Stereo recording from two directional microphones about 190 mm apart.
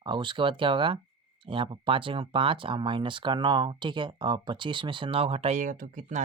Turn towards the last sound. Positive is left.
turn(degrees=-40)  # may be behind; listen again after turning